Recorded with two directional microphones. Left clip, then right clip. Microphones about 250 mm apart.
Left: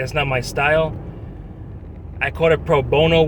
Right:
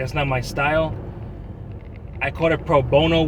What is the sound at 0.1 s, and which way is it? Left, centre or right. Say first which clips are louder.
Speech: left 3 dB; centre.